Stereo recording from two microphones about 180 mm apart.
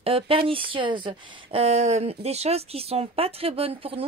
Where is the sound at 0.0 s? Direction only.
30° right (ahead or behind).